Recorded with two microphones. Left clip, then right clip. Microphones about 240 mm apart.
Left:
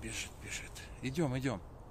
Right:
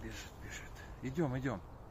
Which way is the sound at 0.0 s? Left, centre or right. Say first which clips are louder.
Left 5 dB; left.